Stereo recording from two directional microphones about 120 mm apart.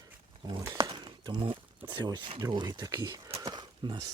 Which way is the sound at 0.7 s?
35° right (ahead or behind).